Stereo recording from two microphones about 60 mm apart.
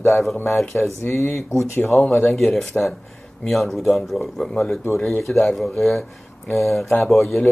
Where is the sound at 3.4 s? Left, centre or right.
Centre.